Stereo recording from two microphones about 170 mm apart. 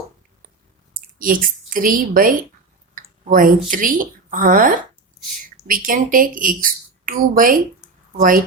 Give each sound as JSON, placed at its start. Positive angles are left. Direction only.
{"t": 1.2, "sound": "a woman's voice", "side_deg": -55}